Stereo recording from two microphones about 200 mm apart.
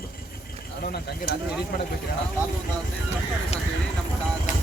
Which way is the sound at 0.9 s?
50° left (ahead or behind).